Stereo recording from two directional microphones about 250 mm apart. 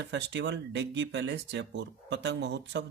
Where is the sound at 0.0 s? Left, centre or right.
Right.